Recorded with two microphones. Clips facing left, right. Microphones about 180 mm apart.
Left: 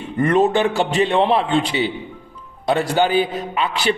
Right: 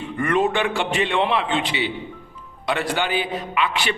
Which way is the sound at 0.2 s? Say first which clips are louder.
Left 5 dB; 35° left (ahead or behind).